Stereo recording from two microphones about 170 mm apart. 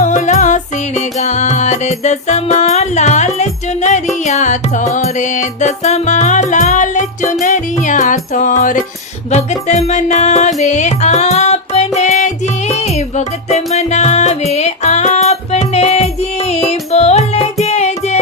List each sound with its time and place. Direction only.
0.0 s music: 45° left (ahead or behind)